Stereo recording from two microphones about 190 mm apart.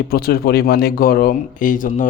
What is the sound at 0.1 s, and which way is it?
Speech, 55° left (ahead or behind).